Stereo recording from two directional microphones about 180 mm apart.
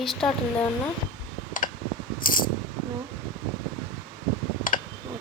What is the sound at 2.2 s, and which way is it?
Coin, 50° left (ahead or behind).